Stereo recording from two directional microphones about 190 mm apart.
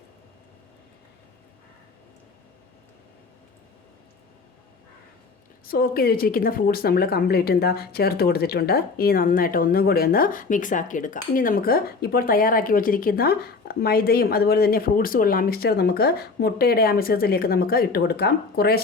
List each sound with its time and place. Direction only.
5.6 s a woman's voice: 50° left (ahead or behind)